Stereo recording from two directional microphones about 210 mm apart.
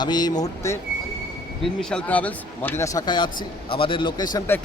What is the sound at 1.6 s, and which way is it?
Speech, 5° left (ahead or behind).